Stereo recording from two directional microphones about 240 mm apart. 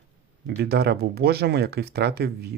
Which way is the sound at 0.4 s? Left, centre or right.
Right.